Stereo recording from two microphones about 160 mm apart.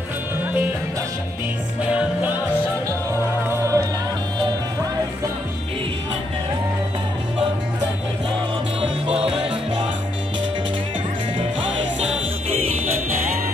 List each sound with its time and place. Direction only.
3.4 s music: 15° right (ahead or behind)
9.0 s music: 40° right (ahead or behind)